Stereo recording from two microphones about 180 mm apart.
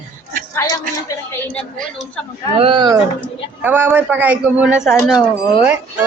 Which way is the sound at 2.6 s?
25° right (ahead or behind).